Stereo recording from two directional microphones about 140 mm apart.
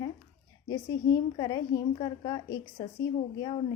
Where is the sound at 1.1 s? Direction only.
30° left (ahead or behind).